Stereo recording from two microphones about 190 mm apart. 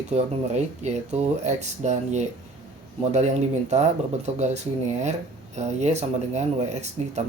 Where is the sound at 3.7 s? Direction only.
35° right (ahead or behind).